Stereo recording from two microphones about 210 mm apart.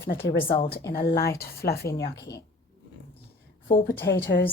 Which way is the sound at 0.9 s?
45° left (ahead or behind).